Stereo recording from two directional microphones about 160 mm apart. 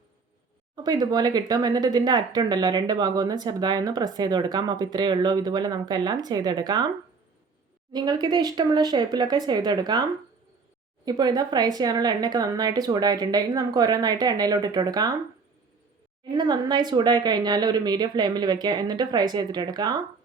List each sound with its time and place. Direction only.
0.8 s speech: 25° right (ahead or behind)
7.9 s speech: 25° right (ahead or behind)
16.3 s speech: 25° right (ahead or behind)